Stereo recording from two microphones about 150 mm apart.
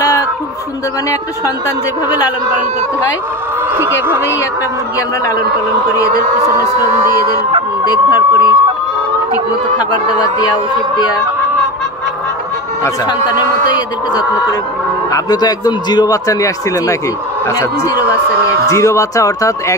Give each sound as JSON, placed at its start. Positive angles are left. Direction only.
{"t": 4.2, "sound": "speech", "side_deg": 20}
{"t": 7.8, "sound": "speech", "side_deg": 25}
{"t": 12.8, "sound": "speech", "side_deg": 25}